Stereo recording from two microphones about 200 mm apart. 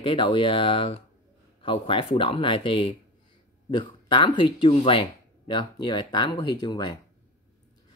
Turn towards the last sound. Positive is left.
turn(degrees=20)  # may be behind; listen again after turning